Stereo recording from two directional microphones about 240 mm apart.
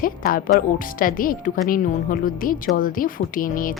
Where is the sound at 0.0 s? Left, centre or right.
Left.